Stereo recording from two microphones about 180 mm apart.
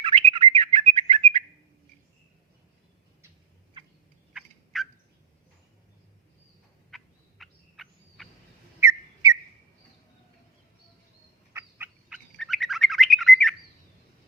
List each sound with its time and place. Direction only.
0.0 s bird: 30° right (ahead or behind)
4.4 s turkey: centre (ahead or behind)
6.9 s gobble: centre (ahead or behind)
8.8 s whistle: 20° right (ahead or behind)
11.5 s bird: 10° right (ahead or behind)